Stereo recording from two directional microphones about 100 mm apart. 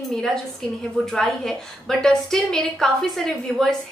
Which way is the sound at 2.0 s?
5° left (ahead or behind).